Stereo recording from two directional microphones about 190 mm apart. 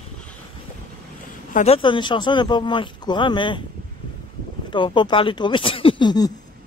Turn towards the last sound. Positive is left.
turn(degrees=25)  # may be behind; listen again after turning